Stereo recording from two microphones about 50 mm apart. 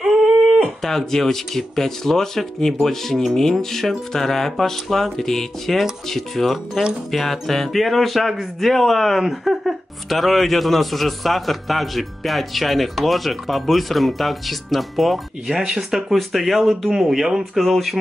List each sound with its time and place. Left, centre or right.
0.0 s a sound: centre
0.8 s speech: centre
15.6 s speech: centre
16.1 s speech: centre